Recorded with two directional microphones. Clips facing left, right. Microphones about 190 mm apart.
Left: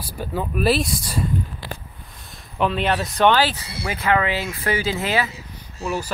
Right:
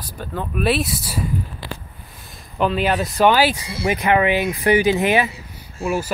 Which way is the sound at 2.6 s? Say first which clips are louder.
Right 2 dB; centre (ahead or behind).